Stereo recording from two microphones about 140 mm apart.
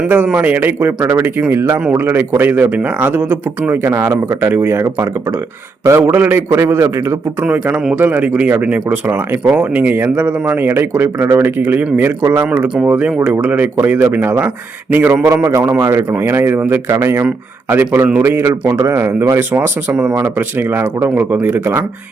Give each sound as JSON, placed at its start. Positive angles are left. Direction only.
{"t": 0.0, "sound": "speech", "side_deg": -10}
{"t": 7.4, "sound": "a man's voice", "side_deg": -10}
{"t": 12.5, "sound": "speech", "side_deg": -5}
{"t": 15.1, "sound": "a man's voice", "side_deg": -25}
{"t": 15.4, "sound": "speech", "side_deg": -15}